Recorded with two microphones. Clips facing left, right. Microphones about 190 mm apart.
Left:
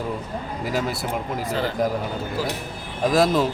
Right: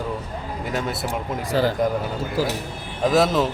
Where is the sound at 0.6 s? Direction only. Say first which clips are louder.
Left 1 dB; centre (ahead or behind).